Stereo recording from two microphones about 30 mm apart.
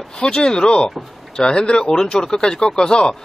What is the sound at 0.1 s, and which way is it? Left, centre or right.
Speech, left.